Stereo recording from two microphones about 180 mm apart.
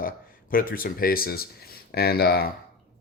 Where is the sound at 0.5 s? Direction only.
50° left (ahead or behind).